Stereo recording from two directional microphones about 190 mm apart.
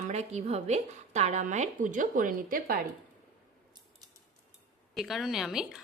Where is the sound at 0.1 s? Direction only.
35° right (ahead or behind).